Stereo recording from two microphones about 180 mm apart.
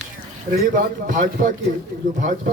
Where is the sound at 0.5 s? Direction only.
50° right (ahead or behind).